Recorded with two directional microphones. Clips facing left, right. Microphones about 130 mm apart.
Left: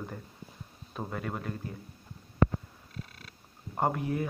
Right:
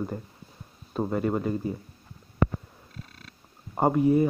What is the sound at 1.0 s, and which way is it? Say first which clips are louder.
Speech: right 10 dB; 10° right (ahead or behind).